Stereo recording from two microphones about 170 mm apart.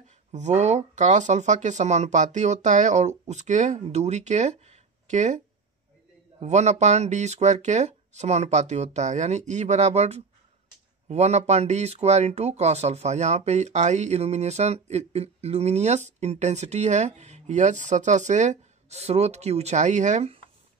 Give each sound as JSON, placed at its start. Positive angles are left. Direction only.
{"t": 0.3, "sound": "speech", "side_deg": -45}
{"t": 6.4, "sound": "speech", "side_deg": -40}